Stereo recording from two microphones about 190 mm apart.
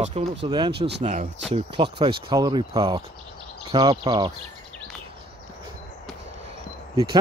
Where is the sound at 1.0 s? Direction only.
40° right (ahead or behind).